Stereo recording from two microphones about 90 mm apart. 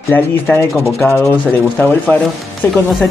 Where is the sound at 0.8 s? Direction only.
35° left (ahead or behind).